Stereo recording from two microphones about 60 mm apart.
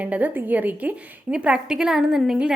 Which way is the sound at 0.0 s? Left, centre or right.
Right.